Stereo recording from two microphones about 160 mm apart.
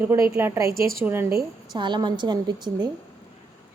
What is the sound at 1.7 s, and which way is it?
A woman's voice, 30° right (ahead or behind).